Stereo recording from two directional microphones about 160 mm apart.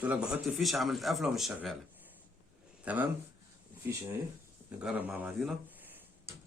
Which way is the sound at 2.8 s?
10° right (ahead or behind).